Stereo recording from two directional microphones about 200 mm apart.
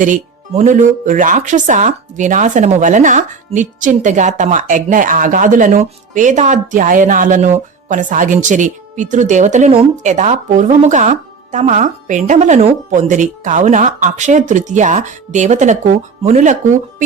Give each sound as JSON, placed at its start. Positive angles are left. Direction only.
{"t": 0.0, "sound": "speech", "side_deg": -40}